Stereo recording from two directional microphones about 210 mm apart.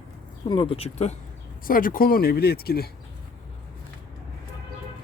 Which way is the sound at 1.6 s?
40° left (ahead or behind).